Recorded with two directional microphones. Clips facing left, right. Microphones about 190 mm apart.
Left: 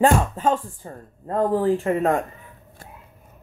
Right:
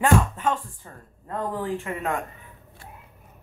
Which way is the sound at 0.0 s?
35° left (ahead or behind).